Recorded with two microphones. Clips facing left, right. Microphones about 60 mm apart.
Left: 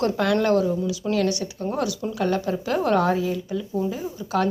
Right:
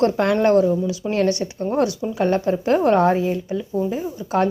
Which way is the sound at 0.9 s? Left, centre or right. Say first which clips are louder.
Right 3 dB; right.